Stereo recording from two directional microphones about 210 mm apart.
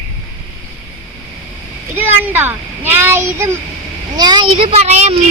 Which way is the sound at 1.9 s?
10° right (ahead or behind).